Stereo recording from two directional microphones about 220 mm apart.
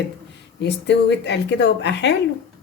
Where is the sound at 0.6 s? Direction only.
50° left (ahead or behind).